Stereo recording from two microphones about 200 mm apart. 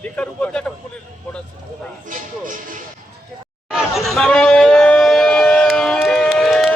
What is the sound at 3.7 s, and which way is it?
Chatter, centre (ahead or behind).